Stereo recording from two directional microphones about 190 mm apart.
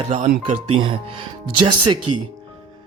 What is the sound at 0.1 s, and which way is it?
Speech, 40° right (ahead or behind).